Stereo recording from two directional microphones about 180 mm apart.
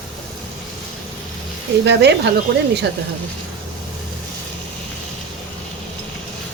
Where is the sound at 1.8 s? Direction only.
70° right (ahead or behind).